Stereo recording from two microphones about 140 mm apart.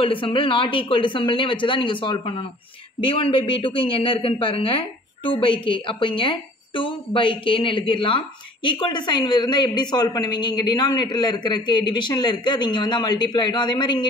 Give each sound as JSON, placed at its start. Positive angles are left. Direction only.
{"t": 0.0, "sound": "a woman's voice", "side_deg": 40}